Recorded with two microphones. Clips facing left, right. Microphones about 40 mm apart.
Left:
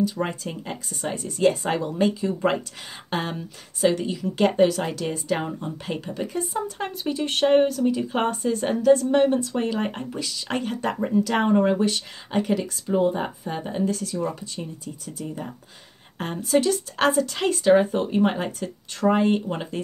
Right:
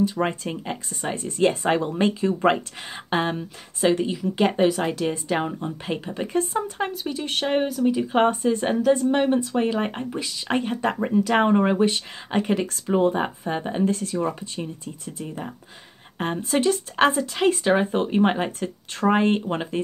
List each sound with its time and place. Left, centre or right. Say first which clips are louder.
0.0 s speech: right 2 dB; right
2.5 s speech: right 1 dB; right
6.9 s speech: left 2 dB; centre; by 12.9 s right
12.9 s speech: right 1 dB; right
13.5 s speech: right 2 dB; right